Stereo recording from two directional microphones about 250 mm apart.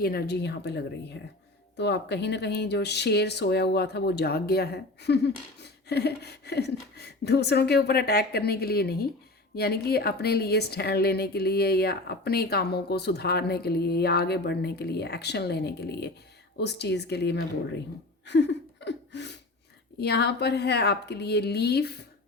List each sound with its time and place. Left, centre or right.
0.0 s speech: left
18.3 s a sound: left
20.0 s speech: left